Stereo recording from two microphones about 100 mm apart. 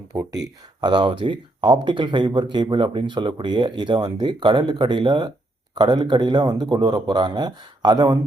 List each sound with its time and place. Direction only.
0.1 s speech: 5° right (ahead or behind)
0.8 s speech: 50° right (ahead or behind)